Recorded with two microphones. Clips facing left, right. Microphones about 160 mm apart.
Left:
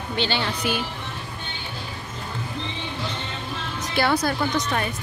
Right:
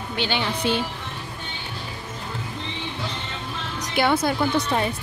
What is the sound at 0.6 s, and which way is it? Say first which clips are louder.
Speech: right 3 dB; 30° right (ahead or behind).